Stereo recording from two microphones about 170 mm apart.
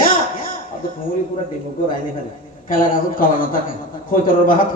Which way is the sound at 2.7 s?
55° left (ahead or behind).